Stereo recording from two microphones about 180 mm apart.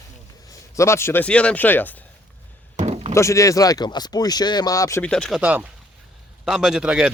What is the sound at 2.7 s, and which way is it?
Chop, 35° right (ahead or behind).